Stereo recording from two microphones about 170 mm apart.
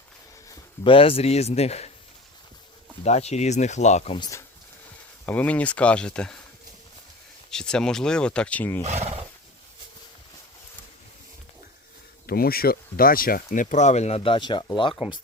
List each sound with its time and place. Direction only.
0.9 s speech: 35° left (ahead or behind)
3.0 s speech: 40° left (ahead or behind)
4.2 s speech: 20° left (ahead or behind)
7.5 s speech: 5° left (ahead or behind)
8.8 s speech: 40° right (ahead or behind)
12.2 s speech: 65° left (ahead or behind); by 14.9 s 30° left (ahead or behind)
14.9 s speech: 5° right (ahead or behind)